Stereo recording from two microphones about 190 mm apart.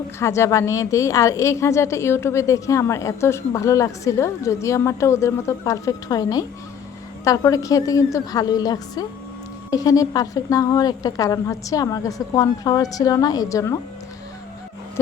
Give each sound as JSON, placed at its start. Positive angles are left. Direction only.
{"t": 0.2, "sound": "a woman's voice", "side_deg": 15}